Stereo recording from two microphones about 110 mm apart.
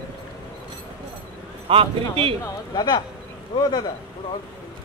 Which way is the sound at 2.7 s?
40° left (ahead or behind).